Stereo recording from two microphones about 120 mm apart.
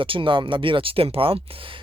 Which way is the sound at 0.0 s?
45° right (ahead or behind).